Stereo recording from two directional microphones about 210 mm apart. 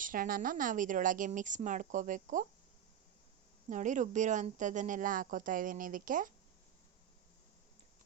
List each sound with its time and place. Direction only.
0.0 s speech: 40° right (ahead or behind)
3.7 s speech: 35° right (ahead or behind)